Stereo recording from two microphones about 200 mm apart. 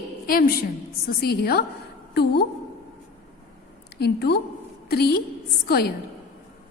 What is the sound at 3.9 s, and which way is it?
A woman's voice, 55° left (ahead or behind).